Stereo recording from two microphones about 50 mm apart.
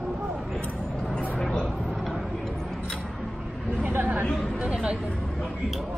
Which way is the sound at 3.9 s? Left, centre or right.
Right.